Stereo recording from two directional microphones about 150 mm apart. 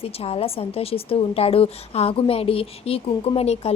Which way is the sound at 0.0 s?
40° left (ahead or behind).